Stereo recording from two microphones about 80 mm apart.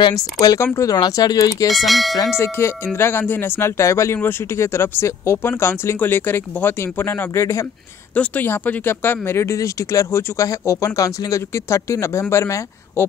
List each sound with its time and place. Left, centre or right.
0.1 s speech: left
1.7 s speech: centre
2.3 s speech: left
8.1 s speech: left